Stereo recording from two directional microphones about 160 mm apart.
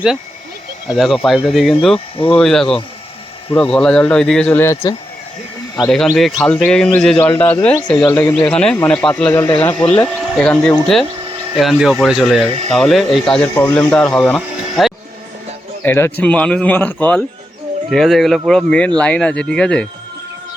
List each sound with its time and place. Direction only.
0.9 s speech: centre (ahead or behind)
2.1 s speech: 35° left (ahead or behind)
2.4 s speech: 5° left (ahead or behind); by 4.9 s 20° left (ahead or behind)
5.9 s speech: centre (ahead or behind)
12.5 s speech: 40° right (ahead or behind)
12.7 s speech: centre (ahead or behind)
15.8 s a man's voice: 15° left (ahead or behind)